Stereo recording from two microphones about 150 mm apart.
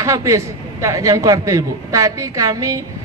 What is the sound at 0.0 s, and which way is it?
A man's voice, 20° right (ahead or behind).